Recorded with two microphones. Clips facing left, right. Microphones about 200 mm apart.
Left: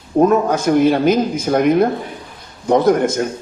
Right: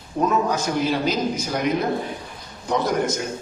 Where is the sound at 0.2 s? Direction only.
55° left (ahead or behind).